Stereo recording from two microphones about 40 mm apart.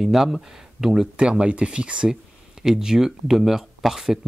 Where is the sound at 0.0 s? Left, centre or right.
Centre.